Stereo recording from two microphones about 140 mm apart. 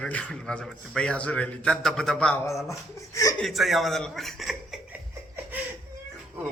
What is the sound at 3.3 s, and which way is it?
Speech, centre (ahead or behind).